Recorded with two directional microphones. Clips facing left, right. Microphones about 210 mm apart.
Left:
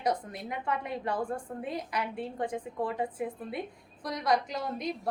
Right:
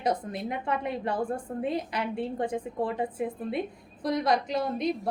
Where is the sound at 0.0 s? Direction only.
25° right (ahead or behind).